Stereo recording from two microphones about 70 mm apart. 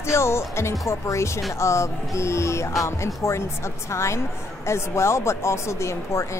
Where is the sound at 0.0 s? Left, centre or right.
Left.